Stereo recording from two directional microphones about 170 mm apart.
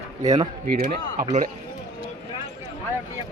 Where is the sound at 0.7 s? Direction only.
55° right (ahead or behind).